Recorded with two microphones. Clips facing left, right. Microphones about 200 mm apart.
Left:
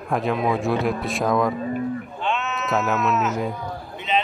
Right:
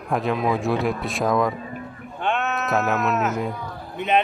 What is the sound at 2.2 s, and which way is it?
Sheep, 55° right (ahead or behind).